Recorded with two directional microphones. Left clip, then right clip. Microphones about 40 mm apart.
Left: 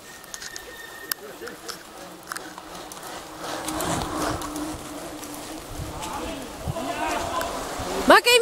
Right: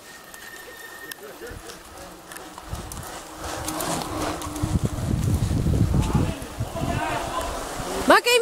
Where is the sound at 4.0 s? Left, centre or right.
Right.